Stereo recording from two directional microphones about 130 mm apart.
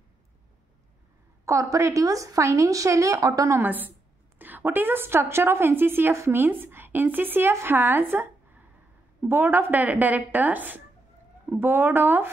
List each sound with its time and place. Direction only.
1.4 s a woman's voice: 25° right (ahead or behind)